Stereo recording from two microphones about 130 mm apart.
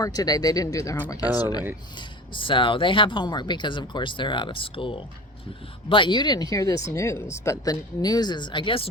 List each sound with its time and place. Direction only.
0.0 s speech: 30° left (ahead or behind)